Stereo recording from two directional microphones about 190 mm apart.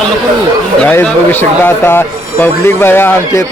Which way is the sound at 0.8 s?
10° left (ahead or behind).